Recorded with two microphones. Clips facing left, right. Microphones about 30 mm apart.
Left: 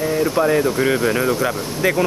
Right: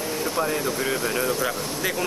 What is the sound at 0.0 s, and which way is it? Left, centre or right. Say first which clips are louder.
Speech: left 8 dB; left.